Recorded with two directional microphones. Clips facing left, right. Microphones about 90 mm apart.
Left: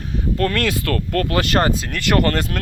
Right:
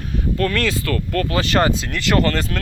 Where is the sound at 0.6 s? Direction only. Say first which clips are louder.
Even; 60° left (ahead or behind).